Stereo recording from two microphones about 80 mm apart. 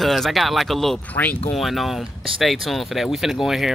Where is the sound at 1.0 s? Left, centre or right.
Centre.